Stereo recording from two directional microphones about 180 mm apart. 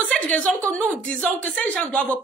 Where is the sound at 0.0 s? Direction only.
5° left (ahead or behind).